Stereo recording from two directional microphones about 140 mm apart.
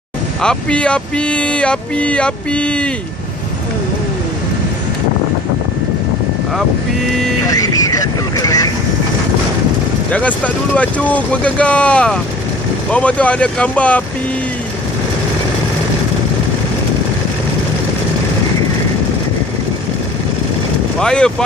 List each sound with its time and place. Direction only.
0.4 s speech: 5° left (ahead or behind)
7.4 s a sound: 25° left (ahead or behind)
10.1 s speech: 10° left (ahead or behind)
21.0 s speech: 5° left (ahead or behind)